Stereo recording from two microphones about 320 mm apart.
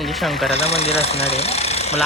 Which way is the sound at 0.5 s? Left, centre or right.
Centre.